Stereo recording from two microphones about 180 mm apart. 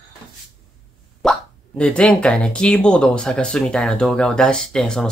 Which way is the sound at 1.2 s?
Centre (ahead or behind).